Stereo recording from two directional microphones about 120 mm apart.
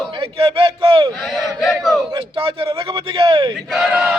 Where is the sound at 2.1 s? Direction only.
50° right (ahead or behind).